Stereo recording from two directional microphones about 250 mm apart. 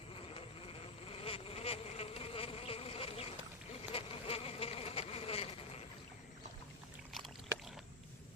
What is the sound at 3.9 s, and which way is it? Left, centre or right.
Insect, left.